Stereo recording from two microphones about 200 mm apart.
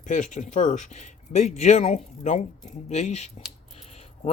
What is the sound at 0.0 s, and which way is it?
Speech, 40° left (ahead or behind).